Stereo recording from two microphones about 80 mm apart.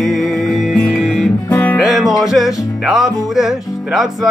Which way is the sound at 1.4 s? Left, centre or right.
Left.